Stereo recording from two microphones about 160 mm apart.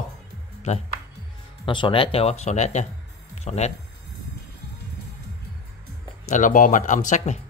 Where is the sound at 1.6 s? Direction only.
30° left (ahead or behind).